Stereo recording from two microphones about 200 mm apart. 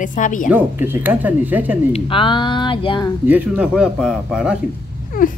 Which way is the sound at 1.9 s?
25° left (ahead or behind).